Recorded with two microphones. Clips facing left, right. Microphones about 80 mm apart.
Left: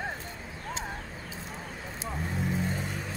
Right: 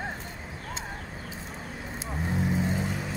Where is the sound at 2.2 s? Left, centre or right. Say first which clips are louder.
Right 4 dB; centre.